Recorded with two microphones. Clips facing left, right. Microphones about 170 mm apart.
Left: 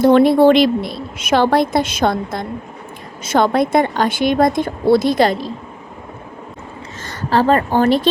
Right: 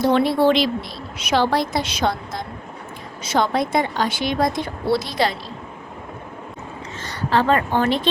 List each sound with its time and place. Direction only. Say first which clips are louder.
0.0 s a woman's voice: left 7 dB; 55° left (ahead or behind)
7.0 s a woman's voice: left 4 dB; 45° left (ahead or behind)